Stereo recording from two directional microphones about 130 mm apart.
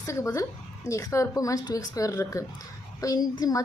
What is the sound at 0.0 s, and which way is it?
A woman's voice, 20° left (ahead or behind).